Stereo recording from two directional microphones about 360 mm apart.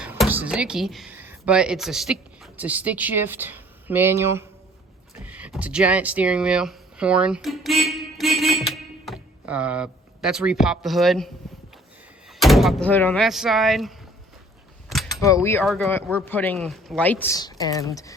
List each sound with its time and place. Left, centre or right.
0.0 s speech: centre
12.3 s speech: centre
14.8 s a sound: centre
15.4 s speech: centre